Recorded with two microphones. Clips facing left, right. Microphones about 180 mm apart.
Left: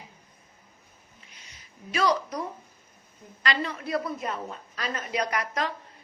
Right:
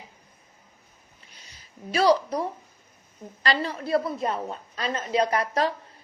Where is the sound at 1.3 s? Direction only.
35° right (ahead or behind).